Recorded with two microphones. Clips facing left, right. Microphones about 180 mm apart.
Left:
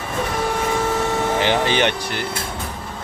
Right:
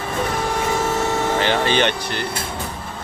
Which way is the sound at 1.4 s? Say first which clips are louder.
Even; 15° left (ahead or behind).